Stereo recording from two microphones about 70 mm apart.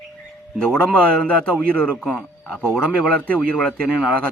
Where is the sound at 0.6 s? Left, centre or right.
Centre.